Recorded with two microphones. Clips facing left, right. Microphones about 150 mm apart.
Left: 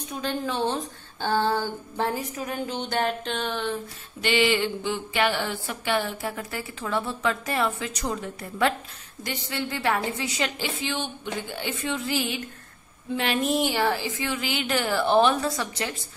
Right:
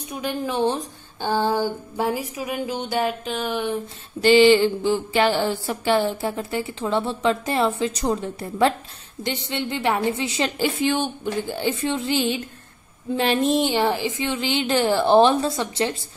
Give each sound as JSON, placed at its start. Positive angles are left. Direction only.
{"t": 0.1, "sound": "a sound", "side_deg": -10}
{"t": 4.2, "sound": "a woman's voice", "side_deg": -35}
{"t": 10.6, "sound": "a woman's voice", "side_deg": -50}
{"t": 11.5, "sound": "a woman's voice", "side_deg": -30}